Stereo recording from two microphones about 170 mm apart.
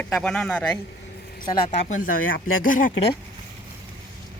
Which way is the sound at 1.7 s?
45° left (ahead or behind).